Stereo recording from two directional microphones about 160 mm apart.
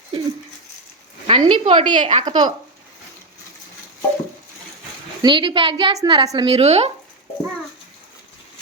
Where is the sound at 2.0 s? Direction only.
45° right (ahead or behind).